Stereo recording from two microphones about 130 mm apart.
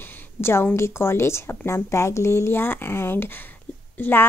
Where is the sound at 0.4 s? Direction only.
20° left (ahead or behind).